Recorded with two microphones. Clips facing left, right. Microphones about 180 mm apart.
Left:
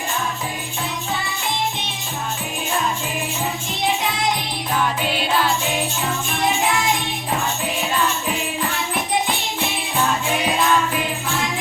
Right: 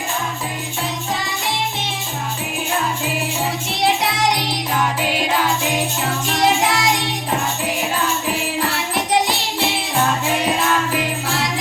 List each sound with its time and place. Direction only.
3.7 s music: 75° right (ahead or behind)
5.0 s music: 15° right (ahead or behind)
6.2 s music: 80° right
9.0 s music: 75° right (ahead or behind)